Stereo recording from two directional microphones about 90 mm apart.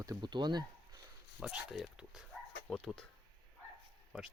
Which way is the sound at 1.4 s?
10° right (ahead or behind).